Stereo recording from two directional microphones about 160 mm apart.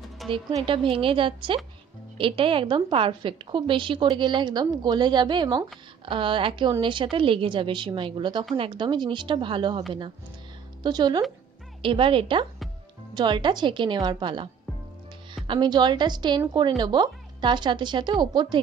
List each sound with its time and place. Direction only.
0.3 s a woman's voice: 25° right (ahead or behind)